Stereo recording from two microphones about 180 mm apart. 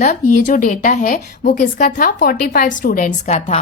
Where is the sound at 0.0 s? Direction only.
45° left (ahead or behind).